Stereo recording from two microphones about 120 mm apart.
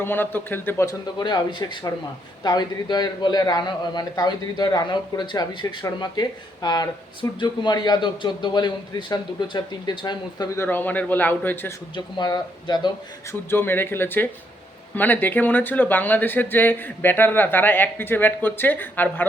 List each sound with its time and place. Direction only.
0.0 s speech: 15° left (ahead or behind)
1.2 s a man's voice: 35° left (ahead or behind)
10.6 s speech: 15° left (ahead or behind)
11.9 s a man's voice: 40° left (ahead or behind)
13.5 s speech: 20° left (ahead or behind)